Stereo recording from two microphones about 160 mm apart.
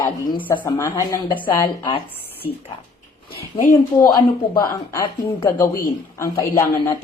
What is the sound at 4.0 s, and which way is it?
A woman's voice, 25° left (ahead or behind).